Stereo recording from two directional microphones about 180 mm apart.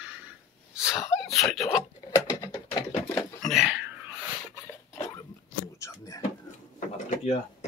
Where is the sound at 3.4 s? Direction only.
Centre (ahead or behind).